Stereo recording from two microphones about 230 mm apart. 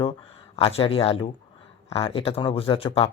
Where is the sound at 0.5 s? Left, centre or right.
Left.